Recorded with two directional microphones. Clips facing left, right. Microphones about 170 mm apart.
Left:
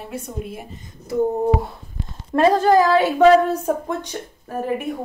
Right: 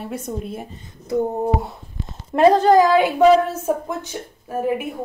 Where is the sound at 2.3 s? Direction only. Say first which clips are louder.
Right 2 dB; 20° right (ahead or behind).